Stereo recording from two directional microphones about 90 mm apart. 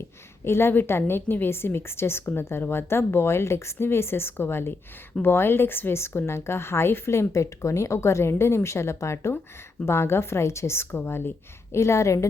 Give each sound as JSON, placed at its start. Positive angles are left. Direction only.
{"t": 0.4, "sound": "a woman's voice", "side_deg": 30}